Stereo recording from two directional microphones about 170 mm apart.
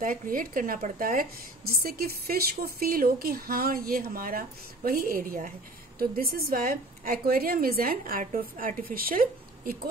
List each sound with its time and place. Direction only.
0.0 s a woman's voice: 55° right (ahead or behind)